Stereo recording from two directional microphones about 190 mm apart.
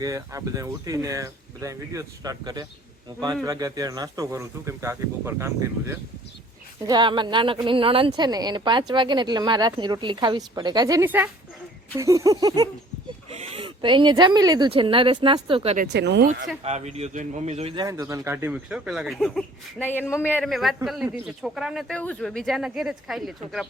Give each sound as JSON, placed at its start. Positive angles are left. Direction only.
{"t": 0.0, "sound": "speech", "side_deg": -15}
{"t": 6.8, "sound": "speech", "side_deg": -25}
{"t": 13.3, "sound": "speech", "side_deg": -30}
{"t": 15.9, "sound": "speech", "side_deg": -65}
{"t": 16.6, "sound": "speech", "side_deg": -35}
{"t": 17.8, "sound": "speech", "side_deg": -15}